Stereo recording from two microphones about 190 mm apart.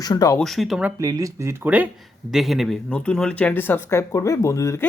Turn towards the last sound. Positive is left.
turn(degrees=15)  # may be behind; listen again after turning